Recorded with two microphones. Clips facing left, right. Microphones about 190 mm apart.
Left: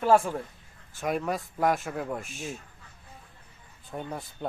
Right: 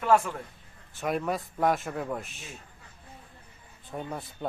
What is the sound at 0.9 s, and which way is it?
Speech, centre (ahead or behind).